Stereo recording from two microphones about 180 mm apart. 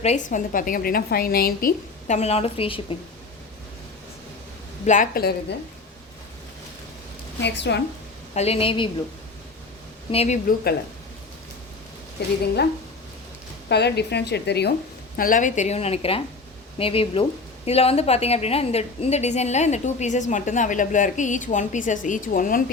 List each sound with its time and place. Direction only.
0.0 s a woman's voice: 40° left (ahead or behind); by 1.7 s 55° left (ahead or behind)
2.0 s a woman's voice: 40° left (ahead or behind)
4.9 s a woman's voice: 50° left (ahead or behind)
7.4 s a woman's voice: 70° left (ahead or behind)
8.4 s a woman's voice: 35° left (ahead or behind)
10.1 s a woman's voice: 35° left (ahead or behind)
12.2 s a woman's voice: 65° left (ahead or behind)
13.7 s a woman's voice: 70° left (ahead or behind)
15.1 s a woman's voice: 50° left (ahead or behind)